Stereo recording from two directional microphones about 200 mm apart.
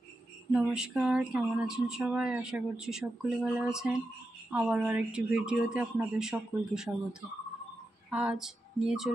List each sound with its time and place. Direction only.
0.5 s speech: 5° right (ahead or behind)
8.1 s music: 5° right (ahead or behind)